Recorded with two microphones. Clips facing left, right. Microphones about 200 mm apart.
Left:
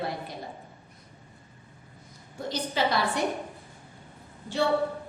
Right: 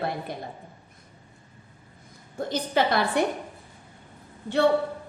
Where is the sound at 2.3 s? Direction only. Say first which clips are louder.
Right 5 dB; 55° right (ahead or behind).